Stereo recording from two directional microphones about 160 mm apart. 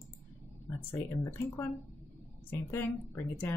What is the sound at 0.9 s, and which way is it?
A woman's voice, 15° left (ahead or behind).